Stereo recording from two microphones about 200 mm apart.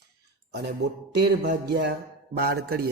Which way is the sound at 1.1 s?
55° right (ahead or behind).